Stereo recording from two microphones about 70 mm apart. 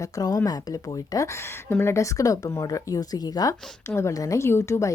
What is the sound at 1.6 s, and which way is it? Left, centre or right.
Speech, left.